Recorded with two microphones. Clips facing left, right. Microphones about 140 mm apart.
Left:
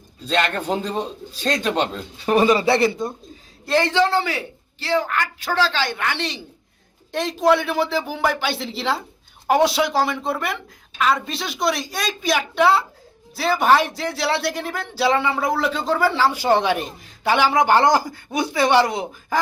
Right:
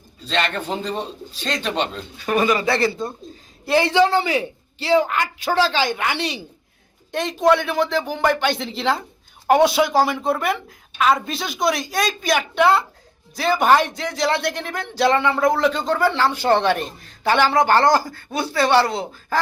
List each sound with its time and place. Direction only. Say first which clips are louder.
0.7 s speech: left 2 dB; 10° left (ahead or behind)
2.1 s speech: left 3 dB; 30° left (ahead or behind)
3.7 s a man's voice: right 2 dB; 10° right (ahead or behind)
7.1 s a woman's voice: right 1 dB; centre (ahead or behind); by 19.4 s 15° left (ahead or behind)